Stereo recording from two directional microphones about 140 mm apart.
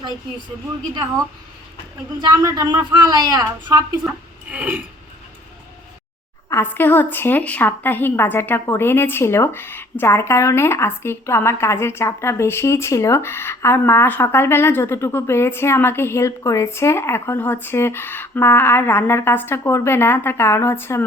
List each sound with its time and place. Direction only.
2.4 s a woman's voice: 20° right (ahead or behind)
4.5 s a sound: 10° right (ahead or behind)
6.5 s a woman's voice: 15° left (ahead or behind)